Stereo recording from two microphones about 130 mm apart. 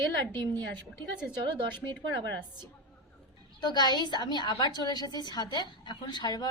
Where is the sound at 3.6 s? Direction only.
35° left (ahead or behind).